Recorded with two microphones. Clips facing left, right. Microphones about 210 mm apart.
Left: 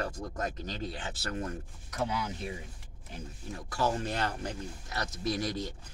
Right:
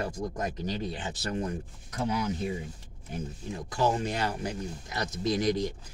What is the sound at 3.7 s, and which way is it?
Speech, 15° right (ahead or behind).